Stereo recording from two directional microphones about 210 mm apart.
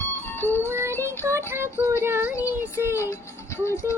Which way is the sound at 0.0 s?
10° left (ahead or behind).